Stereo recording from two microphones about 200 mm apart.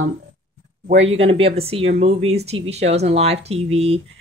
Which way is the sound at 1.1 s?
30° right (ahead or behind).